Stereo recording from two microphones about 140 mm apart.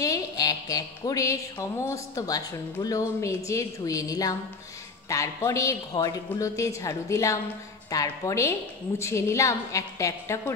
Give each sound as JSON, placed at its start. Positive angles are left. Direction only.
{"t": 0.0, "sound": "speech", "side_deg": 25}